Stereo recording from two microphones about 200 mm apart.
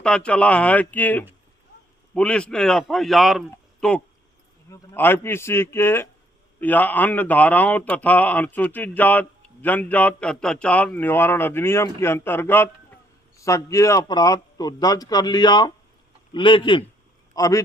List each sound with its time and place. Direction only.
0.0 s a man's voice: 5° left (ahead or behind)